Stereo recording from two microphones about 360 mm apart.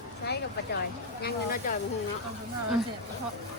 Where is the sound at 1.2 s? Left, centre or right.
Left.